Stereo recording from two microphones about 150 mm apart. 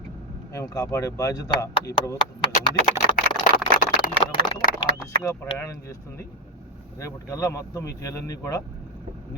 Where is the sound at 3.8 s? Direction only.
60° left (ahead or behind).